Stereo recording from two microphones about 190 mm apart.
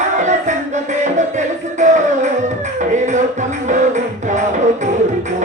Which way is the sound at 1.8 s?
40° right (ahead or behind).